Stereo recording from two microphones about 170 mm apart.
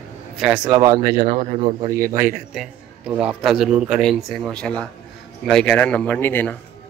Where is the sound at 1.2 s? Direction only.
45° right (ahead or behind).